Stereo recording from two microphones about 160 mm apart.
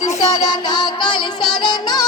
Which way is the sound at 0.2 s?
25° left (ahead or behind).